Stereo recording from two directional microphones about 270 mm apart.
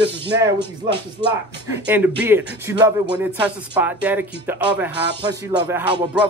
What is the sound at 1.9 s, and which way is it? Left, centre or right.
Speech, centre.